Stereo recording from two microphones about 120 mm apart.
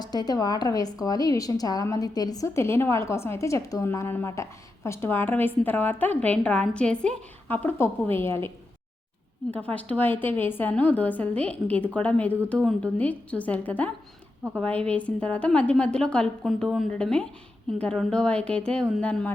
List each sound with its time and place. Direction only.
0.0 s a woman's voice: 35° left (ahead or behind)
9.7 s a woman's voice: 15° left (ahead or behind)